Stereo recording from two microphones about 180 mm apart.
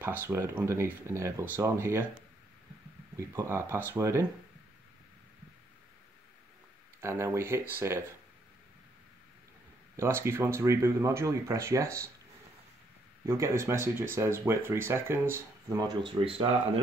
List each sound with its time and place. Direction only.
0.0 s speech: 10° right (ahead or behind)
3.2 s speech: 15° right (ahead or behind)
7.0 s speech: 15° right (ahead or behind)
9.9 s speech: 15° right (ahead or behind)
13.2 s speech: 15° right (ahead or behind)